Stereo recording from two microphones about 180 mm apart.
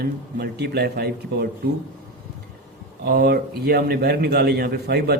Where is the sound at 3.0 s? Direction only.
60° right (ahead or behind).